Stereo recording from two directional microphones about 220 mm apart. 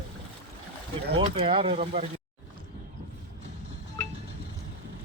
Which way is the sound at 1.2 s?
25° right (ahead or behind).